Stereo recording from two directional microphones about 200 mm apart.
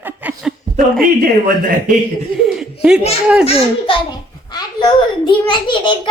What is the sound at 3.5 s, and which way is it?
A child's voice, 30° left (ahead or behind).